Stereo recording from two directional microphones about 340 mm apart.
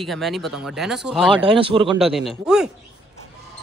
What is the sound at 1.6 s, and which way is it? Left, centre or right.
Speech, centre.